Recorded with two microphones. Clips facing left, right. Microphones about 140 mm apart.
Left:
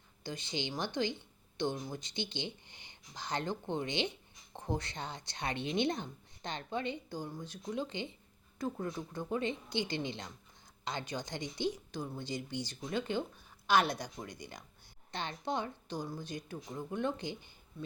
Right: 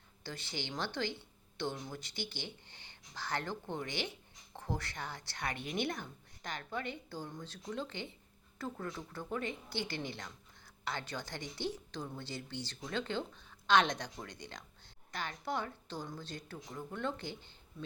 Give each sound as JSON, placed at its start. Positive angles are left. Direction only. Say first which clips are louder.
{"t": 0.2, "sound": "a woman's voice", "louder": "left 4 dB", "side_deg": 15}
{"t": 15.1, "sound": "a woman's voice", "louder": "left 2 dB", "side_deg": 25}